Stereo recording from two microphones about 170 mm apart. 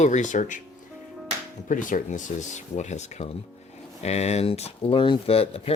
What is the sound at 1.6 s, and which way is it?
Speech, 50° left (ahead or behind).